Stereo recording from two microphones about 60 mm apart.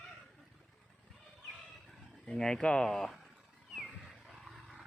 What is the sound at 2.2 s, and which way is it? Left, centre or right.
Speech, centre.